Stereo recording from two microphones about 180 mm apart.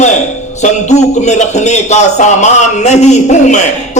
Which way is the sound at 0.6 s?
40° left (ahead or behind).